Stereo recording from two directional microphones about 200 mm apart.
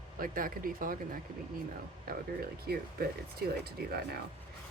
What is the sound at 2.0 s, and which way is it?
Speech, 50° right (ahead or behind).